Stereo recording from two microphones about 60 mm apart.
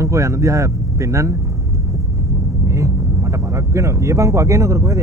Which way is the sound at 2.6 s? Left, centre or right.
Right.